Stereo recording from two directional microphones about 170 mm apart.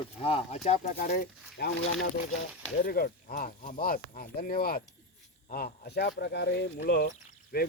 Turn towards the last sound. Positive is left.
turn(degrees=60)  # may be behind; listen again after turning